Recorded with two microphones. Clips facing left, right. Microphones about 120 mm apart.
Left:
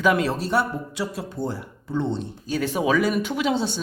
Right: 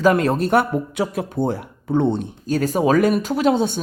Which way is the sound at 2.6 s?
40° right (ahead or behind).